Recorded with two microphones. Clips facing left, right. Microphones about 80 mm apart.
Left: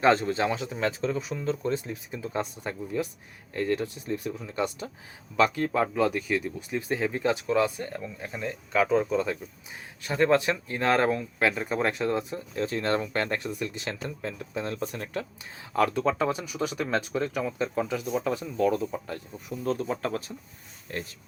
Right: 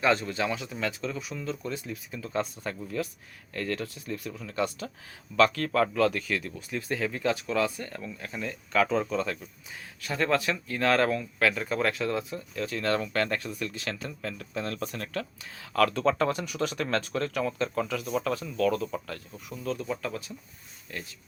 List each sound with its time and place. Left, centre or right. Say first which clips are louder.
0.0 s speech: left 4 dB; left
16.0 s speech: even; centre
19.6 s speech: left 3 dB; left